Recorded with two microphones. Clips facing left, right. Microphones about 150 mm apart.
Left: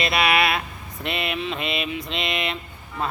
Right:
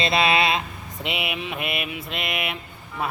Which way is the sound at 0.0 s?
25° right (ahead or behind).